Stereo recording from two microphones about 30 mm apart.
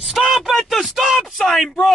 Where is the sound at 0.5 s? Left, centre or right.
Centre.